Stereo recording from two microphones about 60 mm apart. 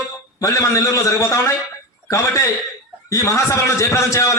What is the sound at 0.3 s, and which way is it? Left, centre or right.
A man's voice, left.